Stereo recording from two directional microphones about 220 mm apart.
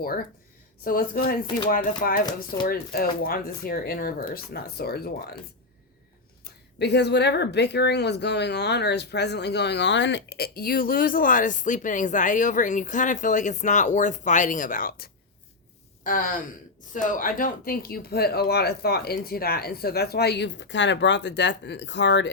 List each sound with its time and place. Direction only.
0.9 s speech: 40° left (ahead or behind)
6.4 s speech: 50° left (ahead or behind)